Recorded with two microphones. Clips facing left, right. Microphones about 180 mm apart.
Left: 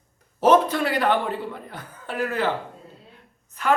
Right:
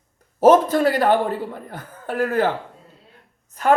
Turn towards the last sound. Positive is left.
turn(degrees=-40)  # may be behind; listen again after turning